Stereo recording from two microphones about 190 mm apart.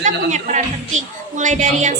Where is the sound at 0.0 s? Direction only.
40° right (ahead or behind).